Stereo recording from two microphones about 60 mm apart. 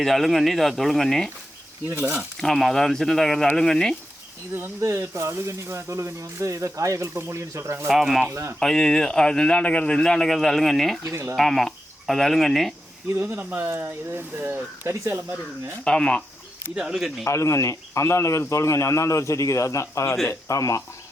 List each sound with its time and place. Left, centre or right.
0.0 s speech: centre
2.4 s speech: centre
4.8 s speech: right
7.1 s speech: right
7.9 s speech: centre
8.3 s speech: right
8.5 s speech: centre
11.1 s speech: right
11.3 s speech: centre
13.3 s speech: right
14.8 s speech: right
15.8 s speech: centre
16.7 s speech: centre
17.2 s speech: left